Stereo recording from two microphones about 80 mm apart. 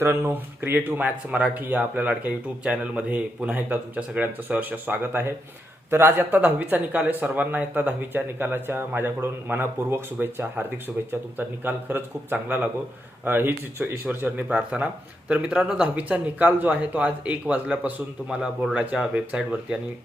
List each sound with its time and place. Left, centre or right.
0.0 s speech: right; by 19.8 s centre